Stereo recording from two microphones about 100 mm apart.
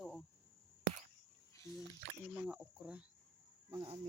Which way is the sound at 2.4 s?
10° right (ahead or behind).